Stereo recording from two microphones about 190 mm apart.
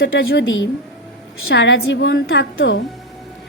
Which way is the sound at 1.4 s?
70° left (ahead or behind).